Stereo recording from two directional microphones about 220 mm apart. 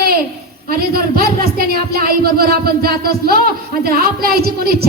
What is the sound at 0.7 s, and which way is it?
Speech, 45° right (ahead or behind).